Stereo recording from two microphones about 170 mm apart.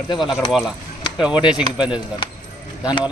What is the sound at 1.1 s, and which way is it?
Speech, 5° right (ahead or behind).